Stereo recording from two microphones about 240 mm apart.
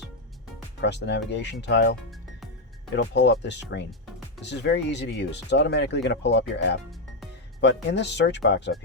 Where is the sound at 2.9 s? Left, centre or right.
Left.